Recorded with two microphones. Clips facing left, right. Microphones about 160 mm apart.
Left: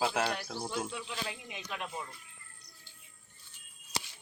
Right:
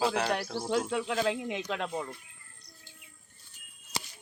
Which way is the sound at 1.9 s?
55° right (ahead or behind).